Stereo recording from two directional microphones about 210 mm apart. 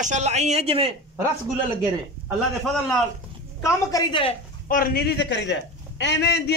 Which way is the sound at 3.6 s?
20° left (ahead or behind).